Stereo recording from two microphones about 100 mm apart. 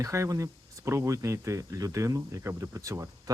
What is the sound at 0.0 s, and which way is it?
Speech, 30° right (ahead or behind).